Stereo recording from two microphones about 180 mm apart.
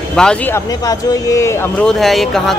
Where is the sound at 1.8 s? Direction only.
Centre (ahead or behind).